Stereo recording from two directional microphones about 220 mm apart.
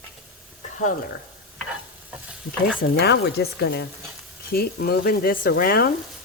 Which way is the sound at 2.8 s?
50° left (ahead or behind).